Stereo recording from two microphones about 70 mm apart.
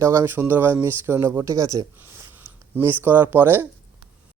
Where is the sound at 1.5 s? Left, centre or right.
Right.